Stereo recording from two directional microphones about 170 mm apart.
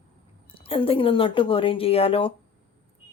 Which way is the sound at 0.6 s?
35° left (ahead or behind).